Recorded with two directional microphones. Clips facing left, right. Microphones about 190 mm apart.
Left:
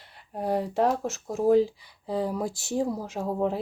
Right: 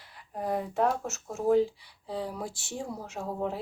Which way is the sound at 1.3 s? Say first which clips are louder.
Left 3 dB; 90° left.